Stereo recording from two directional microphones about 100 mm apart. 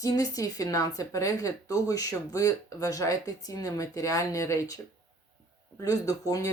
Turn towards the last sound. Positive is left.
turn(degrees=35)  # may be behind; listen again after turning